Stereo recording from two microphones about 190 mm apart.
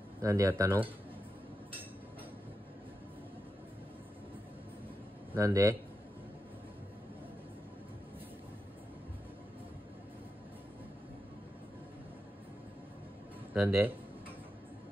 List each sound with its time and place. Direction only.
0.2 s speech: 15° right (ahead or behind)
5.3 s speech: 15° right (ahead or behind)
13.5 s speech: 10° right (ahead or behind)